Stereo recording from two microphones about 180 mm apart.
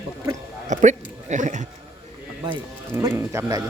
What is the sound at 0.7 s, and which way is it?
Speech, 45° right (ahead or behind).